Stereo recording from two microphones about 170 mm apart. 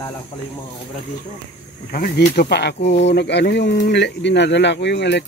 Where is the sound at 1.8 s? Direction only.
60° left (ahead or behind); by 5.2 s 85° left.